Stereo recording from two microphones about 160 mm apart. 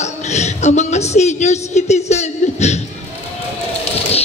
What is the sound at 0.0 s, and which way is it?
A man's voice, 45° left (ahead or behind).